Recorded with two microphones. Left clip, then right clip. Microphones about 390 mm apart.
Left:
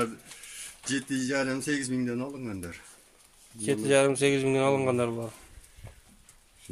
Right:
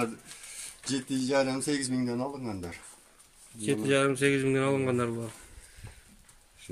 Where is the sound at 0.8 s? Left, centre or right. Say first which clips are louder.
Left 1 dB; centre.